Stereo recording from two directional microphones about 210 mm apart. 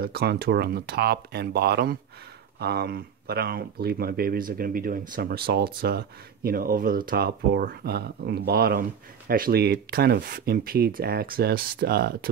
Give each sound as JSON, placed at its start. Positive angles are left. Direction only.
{"t": 0.0, "sound": "speech", "side_deg": -50}